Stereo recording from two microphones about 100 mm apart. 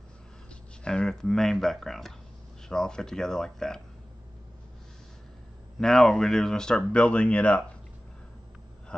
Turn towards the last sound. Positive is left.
turn(degrees=10)  # may be behind; listen again after turning